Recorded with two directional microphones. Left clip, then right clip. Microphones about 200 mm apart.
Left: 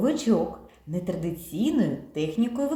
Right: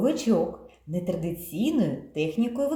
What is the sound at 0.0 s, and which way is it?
A woman's voice, 5° right (ahead or behind).